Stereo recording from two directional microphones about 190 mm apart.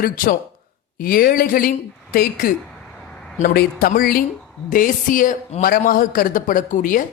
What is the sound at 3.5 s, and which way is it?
Speech, 55° left (ahead or behind).